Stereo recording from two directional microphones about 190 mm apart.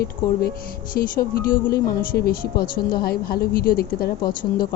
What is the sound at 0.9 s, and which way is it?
A woman's voice, 50° left (ahead or behind).